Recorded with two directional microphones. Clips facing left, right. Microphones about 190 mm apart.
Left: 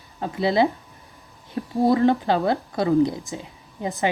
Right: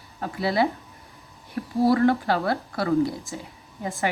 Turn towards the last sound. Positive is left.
turn(degrees=20)  # may be behind; listen again after turning